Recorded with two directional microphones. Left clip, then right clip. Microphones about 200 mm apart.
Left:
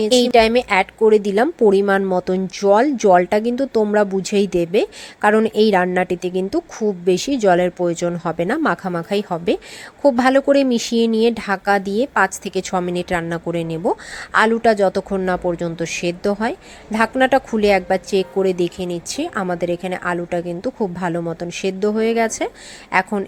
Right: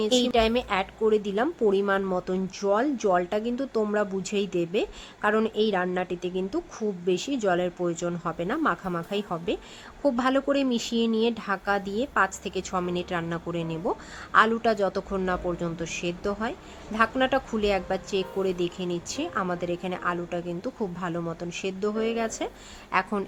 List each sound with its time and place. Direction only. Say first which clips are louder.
0.0 s a woman's voice: left 9 dB; 25° left (ahead or behind)